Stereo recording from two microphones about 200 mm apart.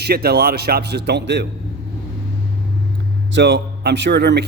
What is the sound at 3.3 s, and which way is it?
A man's voice, 60° right (ahead or behind).